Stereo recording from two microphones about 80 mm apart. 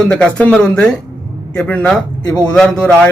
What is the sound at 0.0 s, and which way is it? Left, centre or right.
A man's voice, centre.